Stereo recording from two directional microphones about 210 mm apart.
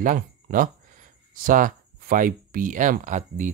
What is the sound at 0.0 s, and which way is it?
Speech, 40° right (ahead or behind).